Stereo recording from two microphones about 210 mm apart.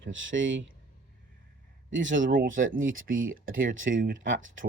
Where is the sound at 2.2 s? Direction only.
40° right (ahead or behind).